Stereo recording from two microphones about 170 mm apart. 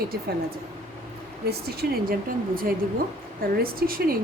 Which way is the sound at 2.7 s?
55° right (ahead or behind).